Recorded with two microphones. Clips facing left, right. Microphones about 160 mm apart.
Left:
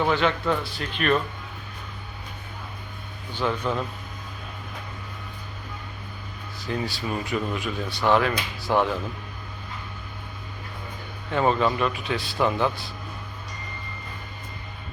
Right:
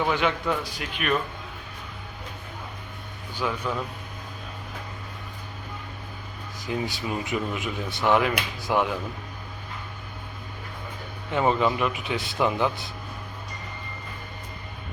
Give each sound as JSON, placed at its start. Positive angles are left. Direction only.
{"t": 0.1, "sound": "speech", "side_deg": -15}
{"t": 3.3, "sound": "speech", "side_deg": -5}
{"t": 6.8, "sound": "speech", "side_deg": -20}
{"t": 11.3, "sound": "speech", "side_deg": -15}